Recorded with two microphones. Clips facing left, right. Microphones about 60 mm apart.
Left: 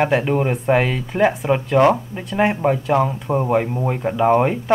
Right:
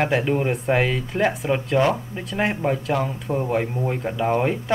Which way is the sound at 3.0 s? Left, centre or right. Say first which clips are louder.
Left 5 dB; centre.